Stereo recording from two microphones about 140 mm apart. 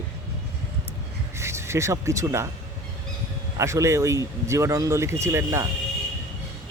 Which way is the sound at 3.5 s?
20° right (ahead or behind).